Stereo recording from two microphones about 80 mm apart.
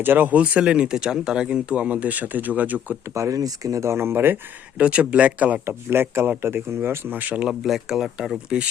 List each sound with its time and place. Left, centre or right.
0.0 s speech: right
3.2 s speech: right
4.8 s speech: centre
5.6 s speech: right
7.6 s speech: centre